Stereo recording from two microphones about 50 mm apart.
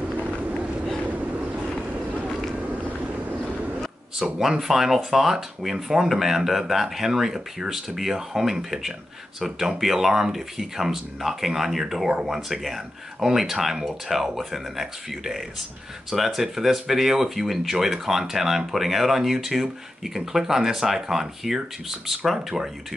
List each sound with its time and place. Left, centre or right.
0.2 s vehicle: right
4.2 s speech: centre